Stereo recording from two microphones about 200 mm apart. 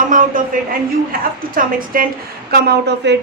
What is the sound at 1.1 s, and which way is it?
Speech, 45° right (ahead or behind).